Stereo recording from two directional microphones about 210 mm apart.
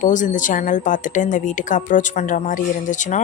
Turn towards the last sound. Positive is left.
turn(degrees=35)  # may be behind; listen again after turning